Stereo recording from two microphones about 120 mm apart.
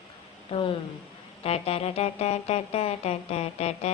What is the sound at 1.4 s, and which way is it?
Music, 55° left (ahead or behind).